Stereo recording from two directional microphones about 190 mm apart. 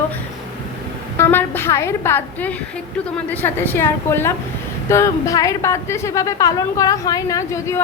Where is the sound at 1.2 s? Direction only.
10° left (ahead or behind).